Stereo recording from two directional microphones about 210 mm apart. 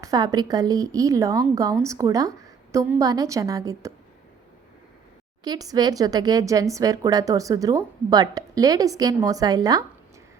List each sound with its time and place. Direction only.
0.0 s speech: 15° right (ahead or behind)
5.4 s speech: 20° right (ahead or behind)